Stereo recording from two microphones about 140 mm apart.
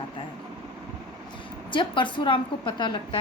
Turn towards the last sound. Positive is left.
turn(degrees=35)  # may be behind; listen again after turning